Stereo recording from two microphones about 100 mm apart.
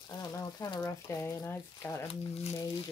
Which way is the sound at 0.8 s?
25° left (ahead or behind).